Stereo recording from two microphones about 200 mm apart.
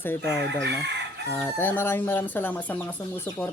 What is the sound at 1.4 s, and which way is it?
Speech, 15° left (ahead or behind).